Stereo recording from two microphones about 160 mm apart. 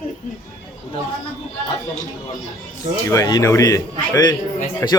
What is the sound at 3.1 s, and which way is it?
A man's voice, 20° left (ahead or behind).